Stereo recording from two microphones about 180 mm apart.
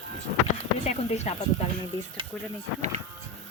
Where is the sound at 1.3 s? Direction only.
35° left (ahead or behind).